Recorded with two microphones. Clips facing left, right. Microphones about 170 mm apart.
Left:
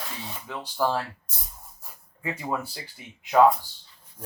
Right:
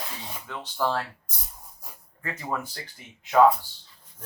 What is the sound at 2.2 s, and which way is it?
Speech, 10° left (ahead or behind).